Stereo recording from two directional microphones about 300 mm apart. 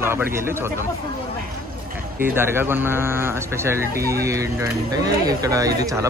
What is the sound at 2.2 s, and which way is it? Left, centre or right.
Speech, centre.